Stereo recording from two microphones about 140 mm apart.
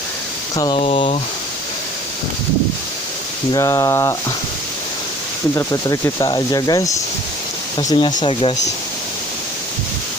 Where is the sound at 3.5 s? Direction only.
25° left (ahead or behind).